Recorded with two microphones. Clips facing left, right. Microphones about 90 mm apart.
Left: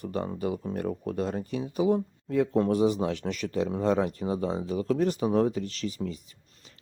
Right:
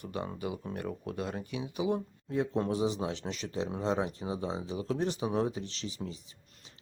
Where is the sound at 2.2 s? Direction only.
55° left (ahead or behind).